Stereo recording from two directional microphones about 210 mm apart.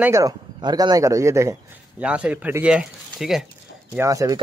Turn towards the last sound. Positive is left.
turn(degrees=-15)  # may be behind; listen again after turning